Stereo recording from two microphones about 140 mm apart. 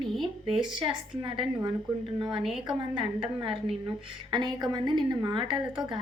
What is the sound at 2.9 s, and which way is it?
A woman's voice, 35° right (ahead or behind).